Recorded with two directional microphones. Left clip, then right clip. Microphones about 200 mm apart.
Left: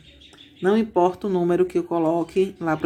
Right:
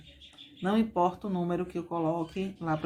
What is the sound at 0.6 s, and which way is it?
Speech, 30° left (ahead or behind).